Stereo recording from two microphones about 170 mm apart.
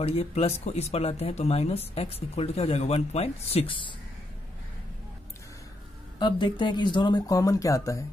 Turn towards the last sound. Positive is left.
turn(degrees=20)  # may be behind; listen again after turning